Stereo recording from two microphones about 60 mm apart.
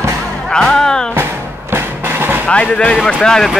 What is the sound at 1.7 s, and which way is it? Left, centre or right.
Music, right.